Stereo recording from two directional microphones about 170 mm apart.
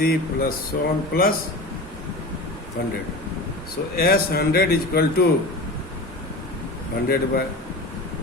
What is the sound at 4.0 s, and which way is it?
Speech, 65° left (ahead or behind).